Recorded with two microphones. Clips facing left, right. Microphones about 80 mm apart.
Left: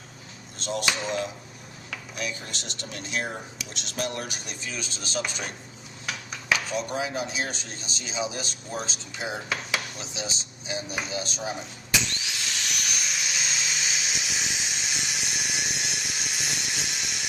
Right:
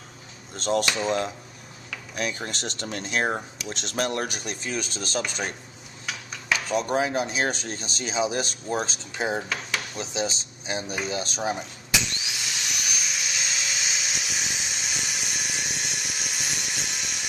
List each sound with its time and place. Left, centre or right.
0.5 s speech: right
6.8 s speech: right
11.9 s a sound: centre